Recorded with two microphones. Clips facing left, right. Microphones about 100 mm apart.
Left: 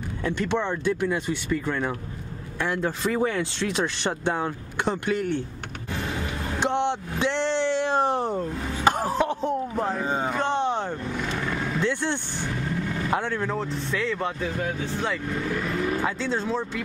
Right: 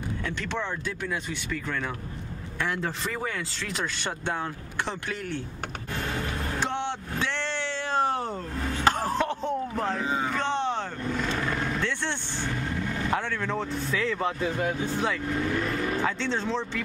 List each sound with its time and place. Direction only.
0.2 s speech: 15° left (ahead or behind)
2.6 s speech: 5° left (ahead or behind)
3.1 s speech: 20° left (ahead or behind)
5.9 s vehicle: 5° left (ahead or behind)
6.6 s speech: 20° left (ahead or behind)
8.7 s a sound: 15° left (ahead or behind)
9.4 s speech: 10° left (ahead or behind)
10.0 s a sound: 40° left (ahead or behind)
10.3 s vehicle: 15° left (ahead or behind)
11.8 s vehicle: 10° left (ahead or behind)
13.2 s speech: 15° left (ahead or behind)
13.6 s speech: centre (ahead or behind)